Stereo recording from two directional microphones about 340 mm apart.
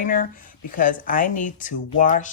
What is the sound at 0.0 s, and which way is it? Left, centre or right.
Speech, left.